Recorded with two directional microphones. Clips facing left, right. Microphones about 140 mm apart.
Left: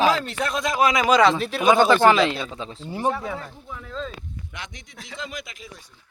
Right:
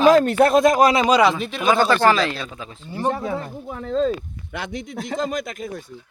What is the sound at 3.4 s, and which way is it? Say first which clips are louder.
Speech: right 7 dB; 50° right (ahead or behind).